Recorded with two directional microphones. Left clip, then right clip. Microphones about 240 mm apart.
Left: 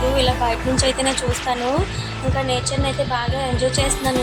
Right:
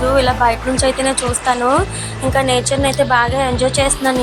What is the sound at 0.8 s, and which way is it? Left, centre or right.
Speech, centre.